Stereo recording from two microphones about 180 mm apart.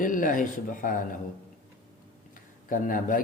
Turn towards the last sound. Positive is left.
turn(degrees=50)  # may be behind; listen again after turning